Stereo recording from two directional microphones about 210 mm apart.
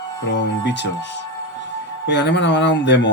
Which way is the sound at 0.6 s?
55° left (ahead or behind).